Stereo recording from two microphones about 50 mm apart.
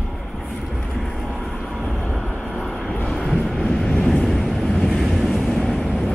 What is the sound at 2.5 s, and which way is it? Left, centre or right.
Vehicle, centre.